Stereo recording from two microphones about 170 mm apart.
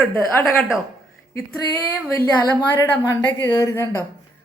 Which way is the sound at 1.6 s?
20° left (ahead or behind).